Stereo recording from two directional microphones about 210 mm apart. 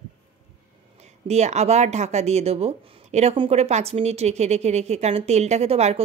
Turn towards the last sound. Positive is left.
turn(degrees=-30)  # may be behind; listen again after turning